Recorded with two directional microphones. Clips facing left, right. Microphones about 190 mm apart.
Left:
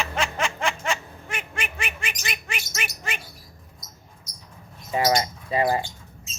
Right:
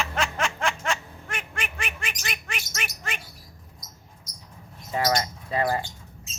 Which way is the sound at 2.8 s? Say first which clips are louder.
Left 2 dB; centre (ahead or behind).